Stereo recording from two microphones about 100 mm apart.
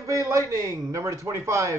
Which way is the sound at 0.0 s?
35° right (ahead or behind).